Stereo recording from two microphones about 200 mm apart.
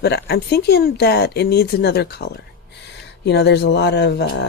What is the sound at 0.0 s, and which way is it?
Speech, 55° left (ahead or behind).